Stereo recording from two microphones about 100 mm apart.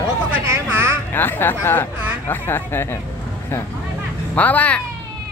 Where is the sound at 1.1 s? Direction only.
20° left (ahead or behind).